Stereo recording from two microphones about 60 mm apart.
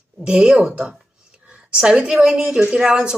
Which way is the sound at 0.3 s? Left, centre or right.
Centre.